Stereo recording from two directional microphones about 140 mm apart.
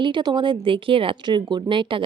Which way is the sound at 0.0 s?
30° right (ahead or behind).